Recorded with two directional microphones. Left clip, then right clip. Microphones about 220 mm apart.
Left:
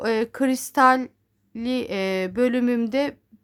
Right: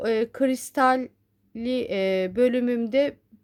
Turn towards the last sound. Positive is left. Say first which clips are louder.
# right 1 dB
turn(degrees=10)  # may be behind; listen again after turning